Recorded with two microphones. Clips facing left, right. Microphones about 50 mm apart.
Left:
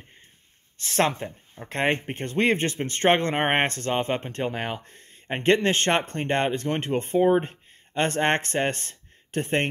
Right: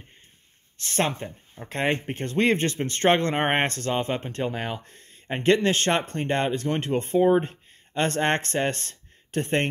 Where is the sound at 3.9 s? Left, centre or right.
Left.